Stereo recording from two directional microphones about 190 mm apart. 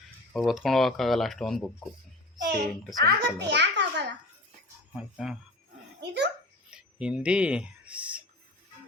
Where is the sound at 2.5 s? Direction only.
60° right (ahead or behind).